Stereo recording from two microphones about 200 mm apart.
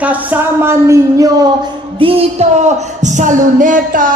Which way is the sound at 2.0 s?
30° right (ahead or behind).